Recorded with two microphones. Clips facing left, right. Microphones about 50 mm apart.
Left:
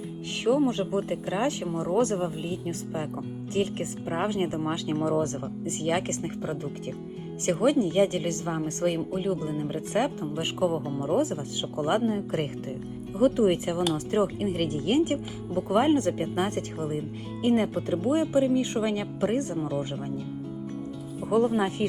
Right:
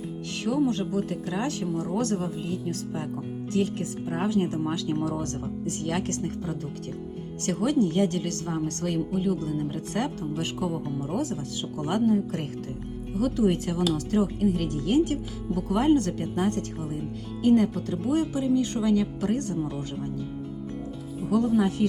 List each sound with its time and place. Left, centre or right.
0.3 s speech: left
10.8 s speech: left
11.2 s speech: left
14.2 s speech: left
16.3 s speech: left
21.2 s speech: left